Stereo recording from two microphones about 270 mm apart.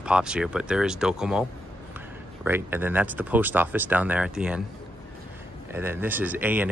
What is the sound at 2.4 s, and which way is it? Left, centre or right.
Speech, centre.